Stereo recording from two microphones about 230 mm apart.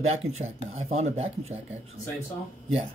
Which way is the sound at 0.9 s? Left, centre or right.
Right.